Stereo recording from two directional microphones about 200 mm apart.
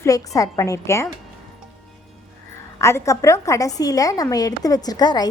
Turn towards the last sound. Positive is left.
turn(degrees=20)  # may be behind; listen again after turning